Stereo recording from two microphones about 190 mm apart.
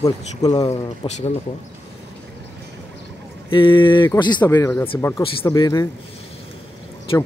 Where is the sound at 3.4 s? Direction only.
25° left (ahead or behind).